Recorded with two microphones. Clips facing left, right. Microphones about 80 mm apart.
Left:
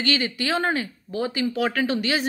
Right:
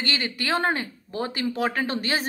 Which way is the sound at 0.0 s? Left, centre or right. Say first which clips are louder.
Left 4 dB; right.